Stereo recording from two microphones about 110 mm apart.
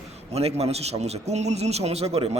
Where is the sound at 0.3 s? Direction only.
70° right (ahead or behind).